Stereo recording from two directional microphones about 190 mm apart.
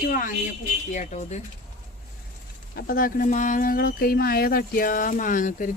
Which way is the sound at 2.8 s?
50° left (ahead or behind).